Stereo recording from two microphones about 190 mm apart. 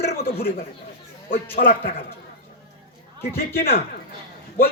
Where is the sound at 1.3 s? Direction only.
45° left (ahead or behind).